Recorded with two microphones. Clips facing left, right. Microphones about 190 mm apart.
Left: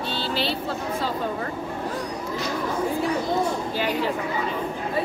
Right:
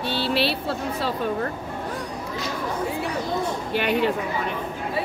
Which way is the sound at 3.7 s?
65° right (ahead or behind).